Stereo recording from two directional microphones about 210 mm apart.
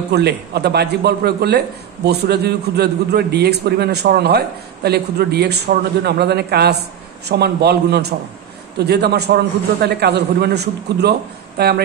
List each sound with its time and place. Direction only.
0.1 s a man's voice: 50° right (ahead or behind)